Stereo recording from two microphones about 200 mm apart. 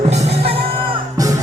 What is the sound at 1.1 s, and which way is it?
Music, 15° right (ahead or behind).